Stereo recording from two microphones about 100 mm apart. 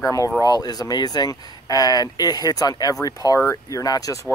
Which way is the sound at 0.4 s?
40° left (ahead or behind).